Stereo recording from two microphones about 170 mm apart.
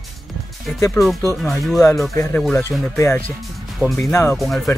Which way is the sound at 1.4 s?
Centre (ahead or behind).